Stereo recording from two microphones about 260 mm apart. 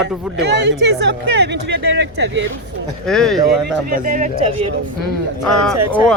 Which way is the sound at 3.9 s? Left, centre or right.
Right.